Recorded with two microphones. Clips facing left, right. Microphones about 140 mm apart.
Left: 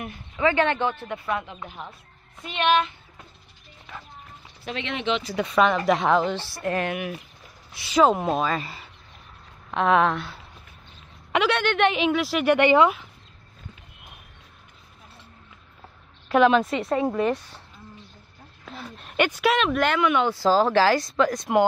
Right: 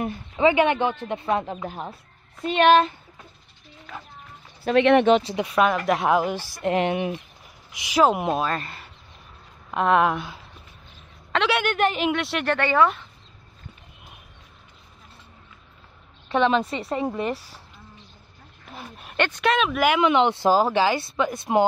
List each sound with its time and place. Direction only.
0.0 s speech: 25° right (ahead or behind)
1.7 s speech: 35° right (ahead or behind)
4.6 s speech: 55° right (ahead or behind)
5.2 s speech: 20° right (ahead or behind)
5.5 s a woman's voice: 5° right (ahead or behind)
8.5 s a woman's voice: centre (ahead or behind)
10.1 s speech: 15° right (ahead or behind)
11.4 s a woman's voice: 5° right (ahead or behind)
12.4 s speech: 15° left (ahead or behind)
16.3 s a woman's voice: centre (ahead or behind)
18.8 s speech: 5° right (ahead or behind)
19.1 s a woman's voice: 10° left (ahead or behind)
20.0 s speech: 20° right (ahead or behind)
20.7 s a woman's voice: 5° right (ahead or behind)